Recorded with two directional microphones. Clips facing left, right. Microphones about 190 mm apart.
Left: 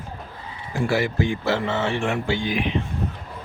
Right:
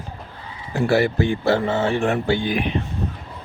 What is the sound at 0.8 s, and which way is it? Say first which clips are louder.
Speech: right 4 dB; 65° right (ahead or behind).